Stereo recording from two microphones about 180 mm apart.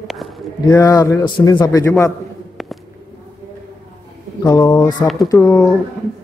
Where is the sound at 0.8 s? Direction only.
20° left (ahead or behind).